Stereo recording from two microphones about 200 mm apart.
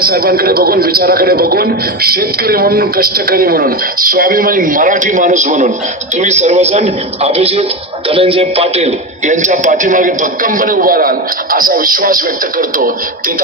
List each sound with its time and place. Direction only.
0.0 s a man's voice: 45° right (ahead or behind)